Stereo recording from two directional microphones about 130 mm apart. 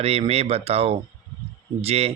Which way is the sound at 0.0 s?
50° right (ahead or behind).